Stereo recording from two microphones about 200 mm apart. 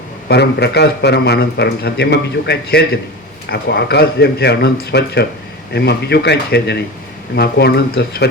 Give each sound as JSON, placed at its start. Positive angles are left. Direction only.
{"t": 0.3, "sound": "a man's voice", "side_deg": 55}